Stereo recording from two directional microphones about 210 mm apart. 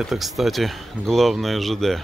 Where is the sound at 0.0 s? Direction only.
Centre (ahead or behind).